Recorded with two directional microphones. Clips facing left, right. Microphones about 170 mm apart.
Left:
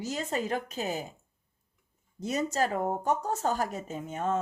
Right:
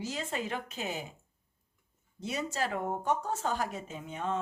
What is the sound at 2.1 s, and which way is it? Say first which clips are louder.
Speech: left 5 dB; 40° left (ahead or behind).